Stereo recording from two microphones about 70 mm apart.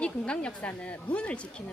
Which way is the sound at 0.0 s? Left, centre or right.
Centre.